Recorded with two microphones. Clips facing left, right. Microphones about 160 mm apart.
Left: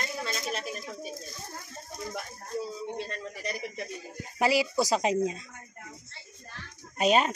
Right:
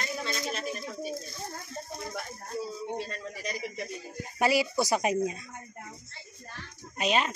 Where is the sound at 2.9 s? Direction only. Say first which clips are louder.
Even; 10° right (ahead or behind).